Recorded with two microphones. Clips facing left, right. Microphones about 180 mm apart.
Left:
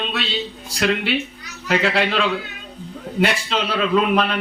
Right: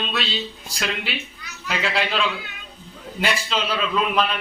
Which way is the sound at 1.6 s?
55° left (ahead or behind).